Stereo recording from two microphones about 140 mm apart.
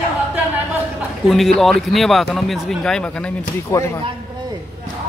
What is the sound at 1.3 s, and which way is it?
Speech, centre (ahead or behind).